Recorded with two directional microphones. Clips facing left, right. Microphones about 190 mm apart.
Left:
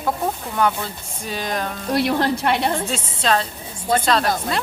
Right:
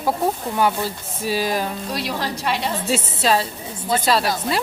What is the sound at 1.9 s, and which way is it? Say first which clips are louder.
Speech: left 11 dB; 55° left (ahead or behind).